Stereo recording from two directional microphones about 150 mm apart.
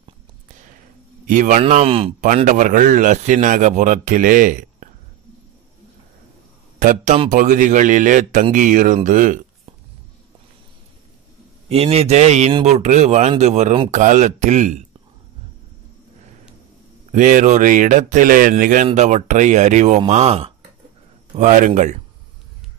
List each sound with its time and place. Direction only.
1.2 s speech: 55° right (ahead or behind)
1.7 s speech: 45° right (ahead or behind)
2.2 s a man's voice: 60° right (ahead or behind)
6.8 s a man's voice: 65° right (ahead or behind)
11.7 s speech: 45° right (ahead or behind)
17.1 s a man's voice: 60° right (ahead or behind)
18.9 s speech: 50° right (ahead or behind)
21.4 s a man's voice: 55° right (ahead or behind)